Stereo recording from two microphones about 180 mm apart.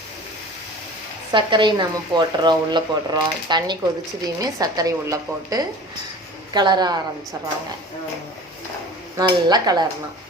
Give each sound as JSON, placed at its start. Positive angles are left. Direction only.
{"t": 1.3, "sound": "speech", "side_deg": -25}
{"t": 9.1, "sound": "speech", "side_deg": -20}